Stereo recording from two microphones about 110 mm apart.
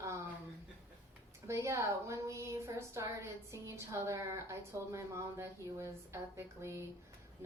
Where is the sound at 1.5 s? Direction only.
25° right (ahead or behind).